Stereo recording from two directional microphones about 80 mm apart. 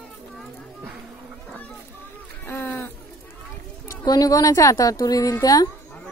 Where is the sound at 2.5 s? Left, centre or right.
Left.